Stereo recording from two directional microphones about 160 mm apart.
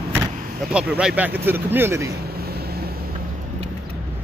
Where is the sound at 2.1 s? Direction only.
75° right (ahead or behind).